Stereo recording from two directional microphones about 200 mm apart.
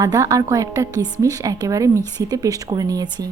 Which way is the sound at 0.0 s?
15° right (ahead or behind).